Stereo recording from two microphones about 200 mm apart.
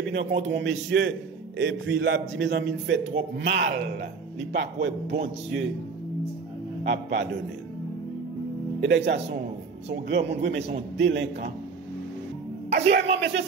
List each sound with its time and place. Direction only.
0.4 s a man's voice: 60° right (ahead or behind)
6.8 s a man's voice: 60° right (ahead or behind)
8.8 s a man's voice: 60° right (ahead or behind)
12.6 s a man's voice: 60° right (ahead or behind)